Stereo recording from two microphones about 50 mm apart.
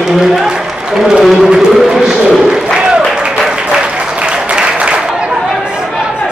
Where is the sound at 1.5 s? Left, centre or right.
Centre.